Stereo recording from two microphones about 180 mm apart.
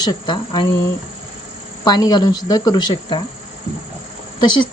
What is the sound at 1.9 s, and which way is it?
Speech, 20° left (ahead or behind).